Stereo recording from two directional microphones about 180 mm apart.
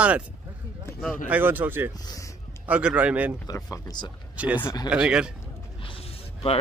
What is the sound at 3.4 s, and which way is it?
Speech, 20° left (ahead or behind).